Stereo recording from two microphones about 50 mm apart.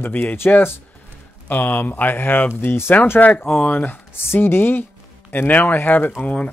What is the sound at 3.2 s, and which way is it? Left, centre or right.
Speech, left.